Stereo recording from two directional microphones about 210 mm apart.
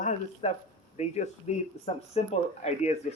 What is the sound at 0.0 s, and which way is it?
Speech, 35° left (ahead or behind).